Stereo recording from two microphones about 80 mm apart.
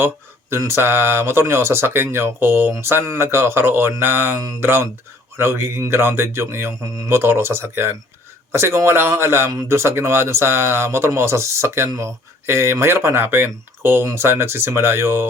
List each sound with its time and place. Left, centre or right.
0.7 s speech: right